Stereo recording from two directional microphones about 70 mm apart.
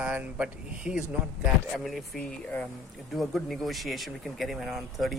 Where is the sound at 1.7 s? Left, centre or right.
Centre.